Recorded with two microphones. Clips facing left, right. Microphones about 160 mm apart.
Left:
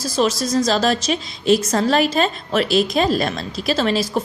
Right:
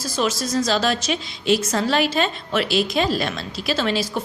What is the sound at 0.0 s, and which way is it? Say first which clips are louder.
A woman's voice: left 4 dB; 35° left (ahead or behind).